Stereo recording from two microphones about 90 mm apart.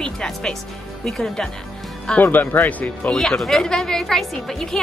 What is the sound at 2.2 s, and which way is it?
Speech, 20° left (ahead or behind).